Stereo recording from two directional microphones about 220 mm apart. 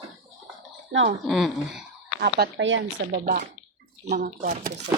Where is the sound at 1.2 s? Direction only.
Centre (ahead or behind).